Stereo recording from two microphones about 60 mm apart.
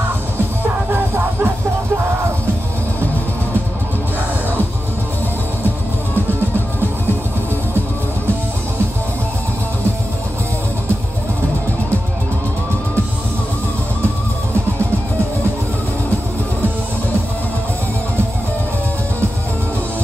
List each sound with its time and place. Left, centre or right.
0.9 s music: right